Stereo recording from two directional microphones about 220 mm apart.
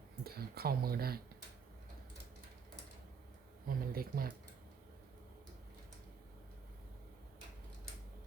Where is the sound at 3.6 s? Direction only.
40° right (ahead or behind).